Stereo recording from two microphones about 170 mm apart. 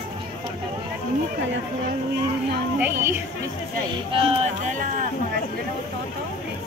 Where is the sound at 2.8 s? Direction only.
15° right (ahead or behind).